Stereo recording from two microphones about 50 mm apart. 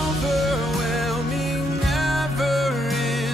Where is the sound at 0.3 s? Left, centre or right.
Centre.